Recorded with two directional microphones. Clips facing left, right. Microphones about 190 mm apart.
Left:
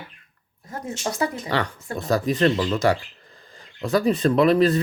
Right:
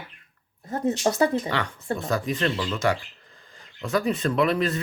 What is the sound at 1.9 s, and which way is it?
Speech, 35° left (ahead or behind).